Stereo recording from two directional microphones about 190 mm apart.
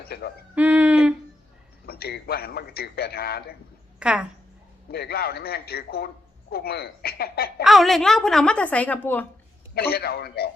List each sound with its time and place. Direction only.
0.0 s speech: 55° left (ahead or behind)
0.5 s speech: 5° right (ahead or behind)
1.9 s a man's voice: 55° left (ahead or behind)
4.0 s a woman's voice: 5° right (ahead or behind)
4.9 s a man's voice: 55° left (ahead or behind)
7.6 s a woman's voice: centre (ahead or behind)
9.7 s a man's voice: 55° left (ahead or behind)